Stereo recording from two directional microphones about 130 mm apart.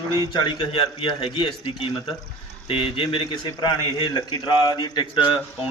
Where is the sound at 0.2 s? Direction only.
35° left (ahead or behind).